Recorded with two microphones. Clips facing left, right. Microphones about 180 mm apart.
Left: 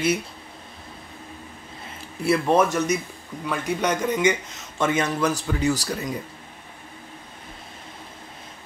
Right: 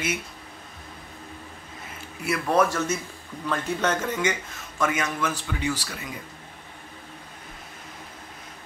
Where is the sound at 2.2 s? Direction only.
25° left (ahead or behind).